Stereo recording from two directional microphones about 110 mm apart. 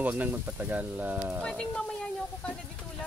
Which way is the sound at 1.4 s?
5° left (ahead or behind).